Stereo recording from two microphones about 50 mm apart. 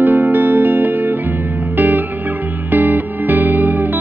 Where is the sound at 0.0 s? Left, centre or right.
Right.